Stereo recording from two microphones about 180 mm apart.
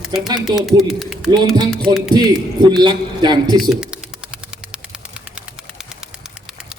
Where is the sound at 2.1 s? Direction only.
20° right (ahead or behind).